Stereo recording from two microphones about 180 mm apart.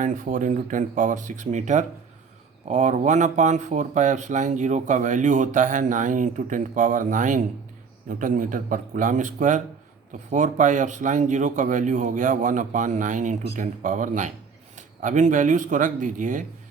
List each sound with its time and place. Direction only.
0.0 s speech: 45° right (ahead or behind)